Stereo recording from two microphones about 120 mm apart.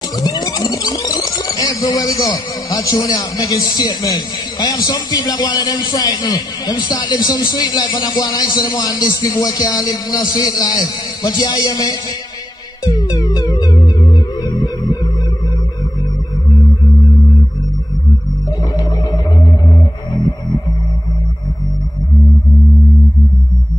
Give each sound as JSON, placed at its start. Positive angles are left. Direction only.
{"t": 0.2, "sound": "speech", "side_deg": 30}
{"t": 12.8, "sound": "music", "side_deg": 35}